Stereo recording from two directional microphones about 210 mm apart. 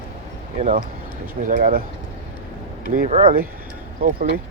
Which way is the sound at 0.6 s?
40° right (ahead or behind).